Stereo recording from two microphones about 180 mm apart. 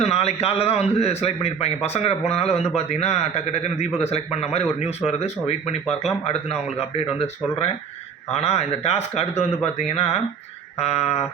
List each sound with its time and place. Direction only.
0.0 s speech: 35° left (ahead or behind)